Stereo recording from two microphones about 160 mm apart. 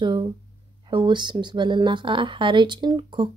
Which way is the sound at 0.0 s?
25° right (ahead or behind).